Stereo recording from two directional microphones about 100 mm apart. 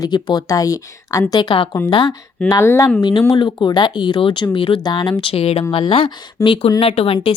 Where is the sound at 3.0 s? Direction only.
45° left (ahead or behind); by 4.8 s 65° left (ahead or behind).